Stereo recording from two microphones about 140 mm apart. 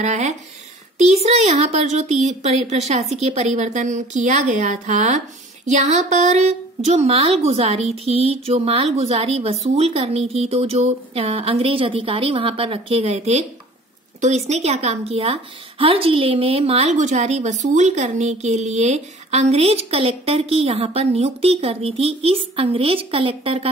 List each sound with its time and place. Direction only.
0.0 s a woman's voice: 55° right (ahead or behind)